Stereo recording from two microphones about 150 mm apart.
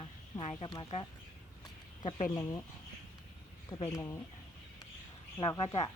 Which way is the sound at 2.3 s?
20° left (ahead or behind).